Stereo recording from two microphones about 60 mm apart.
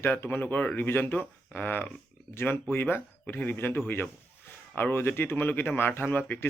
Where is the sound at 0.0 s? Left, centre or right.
Left.